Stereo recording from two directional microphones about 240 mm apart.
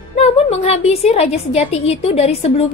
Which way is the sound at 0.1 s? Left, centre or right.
Left.